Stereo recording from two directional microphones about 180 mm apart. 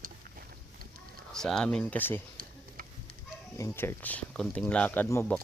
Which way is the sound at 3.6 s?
10° left (ahead or behind).